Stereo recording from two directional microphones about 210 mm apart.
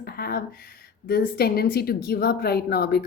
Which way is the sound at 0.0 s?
45° left (ahead or behind).